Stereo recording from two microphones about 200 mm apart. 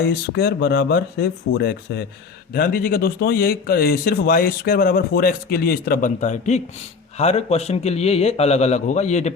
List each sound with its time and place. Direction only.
0.0 s a man's voice: 50° left (ahead or behind); by 9.3 s 35° left (ahead or behind)